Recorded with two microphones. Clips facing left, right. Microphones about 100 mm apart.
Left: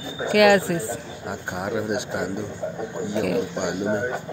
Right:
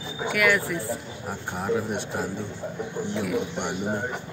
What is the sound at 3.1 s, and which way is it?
Speech, 75° left (ahead or behind).